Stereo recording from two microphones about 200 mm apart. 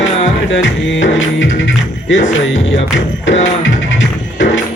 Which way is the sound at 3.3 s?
65° left (ahead or behind).